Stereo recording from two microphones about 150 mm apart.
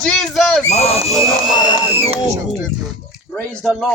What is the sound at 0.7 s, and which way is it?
Speech, 45° left (ahead or behind).